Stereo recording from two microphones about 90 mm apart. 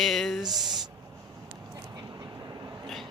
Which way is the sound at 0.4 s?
50° right (ahead or behind).